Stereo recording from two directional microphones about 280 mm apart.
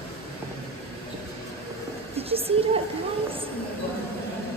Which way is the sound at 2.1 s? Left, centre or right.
Right.